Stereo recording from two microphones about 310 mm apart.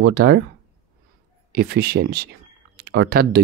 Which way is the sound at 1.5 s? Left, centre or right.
Right.